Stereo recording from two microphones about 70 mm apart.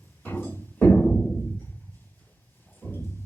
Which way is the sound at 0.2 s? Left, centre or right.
Left.